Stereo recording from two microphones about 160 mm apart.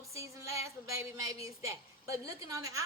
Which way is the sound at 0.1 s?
20° right (ahead or behind).